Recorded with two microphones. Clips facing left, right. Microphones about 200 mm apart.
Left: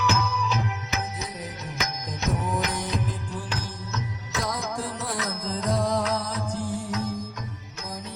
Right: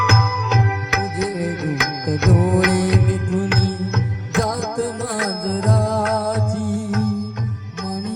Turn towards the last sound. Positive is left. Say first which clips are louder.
# right 8 dB
turn(degrees=-50)  # may be behind; listen again after turning